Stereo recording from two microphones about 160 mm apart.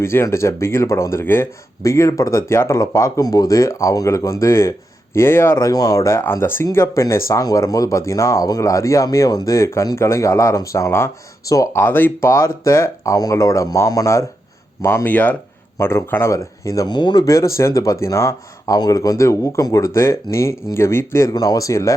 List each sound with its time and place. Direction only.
0.0 s speech: 15° left (ahead or behind)